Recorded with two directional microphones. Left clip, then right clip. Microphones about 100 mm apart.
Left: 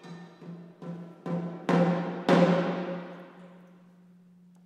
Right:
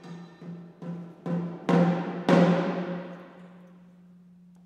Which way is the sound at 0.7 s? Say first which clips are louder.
Right 1 dB; 20° right (ahead or behind).